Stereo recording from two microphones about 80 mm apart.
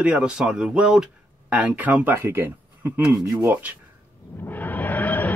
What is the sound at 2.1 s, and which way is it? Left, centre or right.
Speech, right.